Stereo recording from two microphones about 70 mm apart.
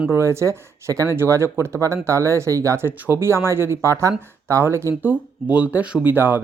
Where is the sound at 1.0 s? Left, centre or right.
Right.